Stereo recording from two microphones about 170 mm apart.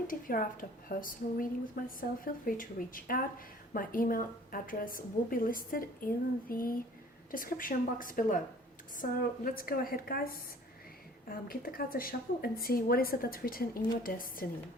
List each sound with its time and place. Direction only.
0.1 s a woman's voice: 55° left (ahead or behind)